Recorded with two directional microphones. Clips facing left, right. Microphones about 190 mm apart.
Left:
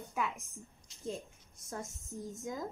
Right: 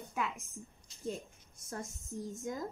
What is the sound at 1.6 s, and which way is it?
Speech, centre (ahead or behind).